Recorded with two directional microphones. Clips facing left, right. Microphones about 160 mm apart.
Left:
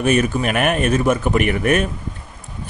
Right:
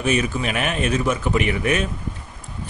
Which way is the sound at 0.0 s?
55° left (ahead or behind).